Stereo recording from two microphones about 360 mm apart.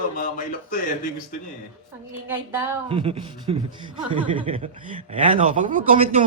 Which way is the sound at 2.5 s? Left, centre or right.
Centre.